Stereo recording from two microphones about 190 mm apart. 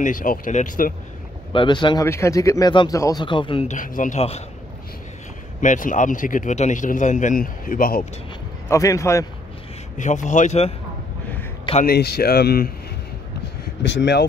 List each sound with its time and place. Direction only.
0.0 s a man's voice: 45° left (ahead or behind)
1.5 s speech: 25° left (ahead or behind)
3.7 s a man's voice: 45° left (ahead or behind)
5.6 s a man's voice: 45° left (ahead or behind)
8.6 s a man's voice: 15° left (ahead or behind)
9.9 s speech: 40° left (ahead or behind)
11.8 s speech: 55° left (ahead or behind)
13.8 s speech: 65° left (ahead or behind)